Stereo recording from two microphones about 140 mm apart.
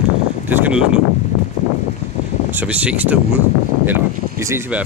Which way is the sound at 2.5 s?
10° right (ahead or behind).